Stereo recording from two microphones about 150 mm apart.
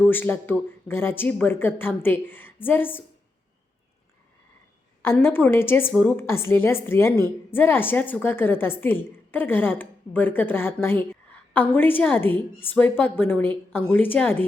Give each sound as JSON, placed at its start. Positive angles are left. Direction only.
{"t": 0.0, "sound": "a woman's voice", "side_deg": 15}
{"t": 5.0, "sound": "a woman's voice", "side_deg": 15}